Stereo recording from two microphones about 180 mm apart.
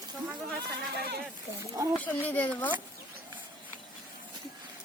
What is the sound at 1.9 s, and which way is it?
Speech, 10° left (ahead or behind).